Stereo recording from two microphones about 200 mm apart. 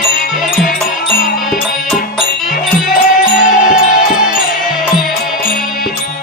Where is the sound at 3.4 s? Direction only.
40° left (ahead or behind).